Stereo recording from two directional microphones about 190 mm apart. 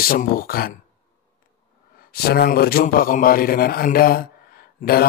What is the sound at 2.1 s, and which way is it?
Speech, 55° left (ahead or behind).